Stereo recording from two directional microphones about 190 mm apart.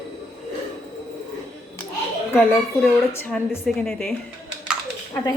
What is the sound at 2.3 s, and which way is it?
A child's voice, 10° left (ahead or behind).